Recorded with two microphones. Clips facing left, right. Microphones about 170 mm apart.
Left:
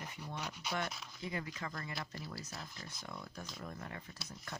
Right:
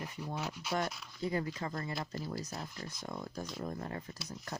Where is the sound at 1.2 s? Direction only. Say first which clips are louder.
Right 7 dB; 40° right (ahead or behind).